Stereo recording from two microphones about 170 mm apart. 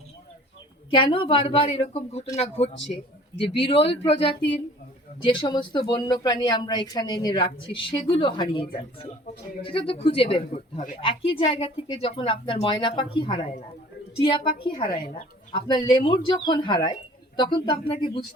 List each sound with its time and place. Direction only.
0.9 s speech: 30° left (ahead or behind)